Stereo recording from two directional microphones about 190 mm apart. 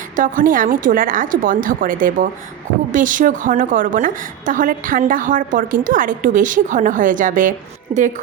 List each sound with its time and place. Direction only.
0.2 s a woman's voice: 45° right (ahead or behind)